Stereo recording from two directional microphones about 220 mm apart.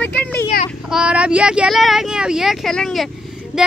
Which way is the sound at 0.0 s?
5° left (ahead or behind).